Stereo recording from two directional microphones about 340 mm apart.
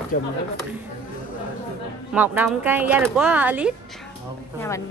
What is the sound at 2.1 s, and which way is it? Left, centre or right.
Speech, centre.